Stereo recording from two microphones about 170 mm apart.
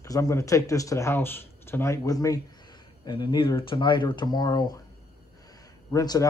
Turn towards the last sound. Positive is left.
turn(degrees=20)  # may be behind; listen again after turning